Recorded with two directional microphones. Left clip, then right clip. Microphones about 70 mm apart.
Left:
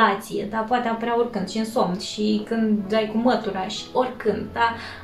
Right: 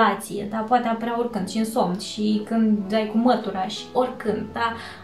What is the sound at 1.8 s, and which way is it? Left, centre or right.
A woman's voice, right.